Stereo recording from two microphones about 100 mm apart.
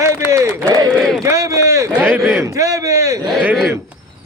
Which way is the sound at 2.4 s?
30° right (ahead or behind).